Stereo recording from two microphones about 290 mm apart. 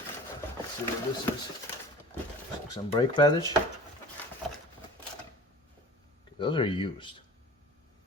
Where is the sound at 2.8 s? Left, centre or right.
Centre.